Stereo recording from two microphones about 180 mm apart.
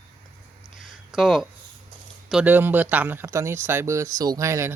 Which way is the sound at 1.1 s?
Centre (ahead or behind).